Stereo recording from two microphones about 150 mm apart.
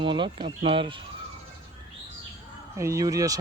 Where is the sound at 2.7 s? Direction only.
20° right (ahead or behind).